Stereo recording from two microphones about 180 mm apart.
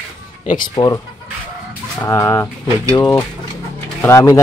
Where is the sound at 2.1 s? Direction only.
20° left (ahead or behind).